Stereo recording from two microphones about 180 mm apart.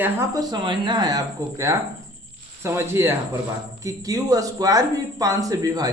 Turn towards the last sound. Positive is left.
turn(degrees=-20)  # may be behind; listen again after turning